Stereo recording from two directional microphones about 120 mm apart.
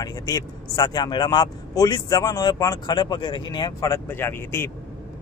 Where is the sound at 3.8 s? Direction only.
20° left (ahead or behind).